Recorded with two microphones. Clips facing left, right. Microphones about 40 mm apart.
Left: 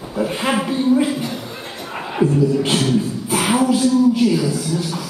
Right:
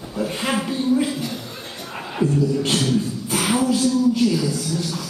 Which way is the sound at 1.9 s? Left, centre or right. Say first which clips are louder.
Left 4 dB; centre.